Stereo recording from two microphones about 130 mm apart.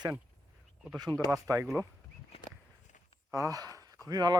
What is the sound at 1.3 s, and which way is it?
Speech, 25° right (ahead or behind).